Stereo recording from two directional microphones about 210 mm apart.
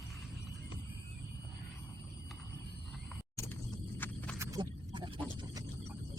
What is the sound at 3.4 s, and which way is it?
Horse, 10° left (ahead or behind).